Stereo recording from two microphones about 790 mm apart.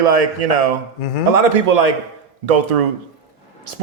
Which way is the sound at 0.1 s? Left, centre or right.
Right.